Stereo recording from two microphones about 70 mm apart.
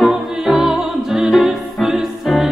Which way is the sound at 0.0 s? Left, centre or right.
Centre.